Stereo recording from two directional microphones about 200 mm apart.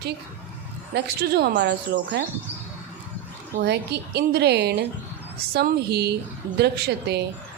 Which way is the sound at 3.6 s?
55° right (ahead or behind).